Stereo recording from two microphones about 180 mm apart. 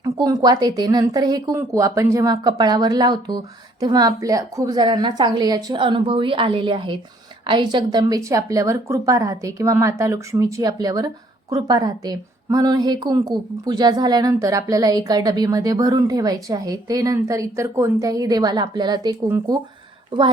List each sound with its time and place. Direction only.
0.0 s a woman's voice: 20° right (ahead or behind)